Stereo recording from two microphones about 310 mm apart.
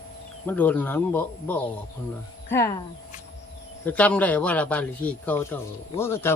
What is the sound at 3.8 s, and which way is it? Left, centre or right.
Speech, centre.